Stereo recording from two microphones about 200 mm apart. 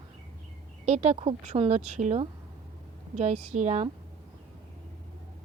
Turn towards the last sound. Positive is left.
turn(degrees=-35)  # may be behind; listen again after turning